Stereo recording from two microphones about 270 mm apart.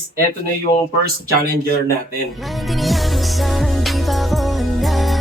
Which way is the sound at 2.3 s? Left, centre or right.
Centre.